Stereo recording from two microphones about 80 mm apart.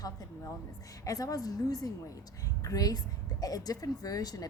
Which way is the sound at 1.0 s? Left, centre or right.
Left.